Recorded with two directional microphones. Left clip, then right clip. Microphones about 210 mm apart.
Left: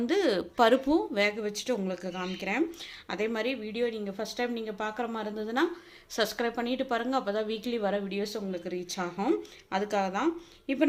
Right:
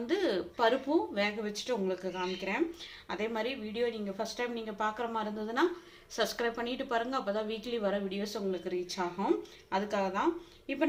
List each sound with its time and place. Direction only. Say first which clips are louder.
0.1 s a woman's voice: left 3 dB; 40° left (ahead or behind)